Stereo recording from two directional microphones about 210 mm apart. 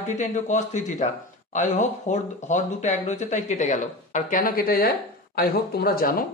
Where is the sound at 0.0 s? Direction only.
35° left (ahead or behind).